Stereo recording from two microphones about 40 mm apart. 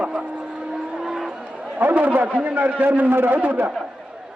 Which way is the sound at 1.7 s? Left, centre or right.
Right.